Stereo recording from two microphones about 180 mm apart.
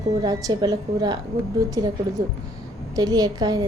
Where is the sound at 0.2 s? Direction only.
20° right (ahead or behind).